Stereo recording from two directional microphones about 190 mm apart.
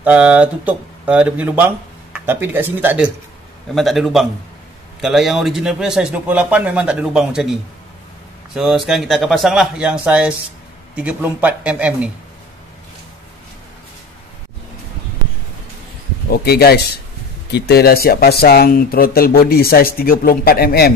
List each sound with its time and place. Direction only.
0.0 s speech: 5° right (ahead or behind)
16.3 s a man's voice: 55° left (ahead or behind)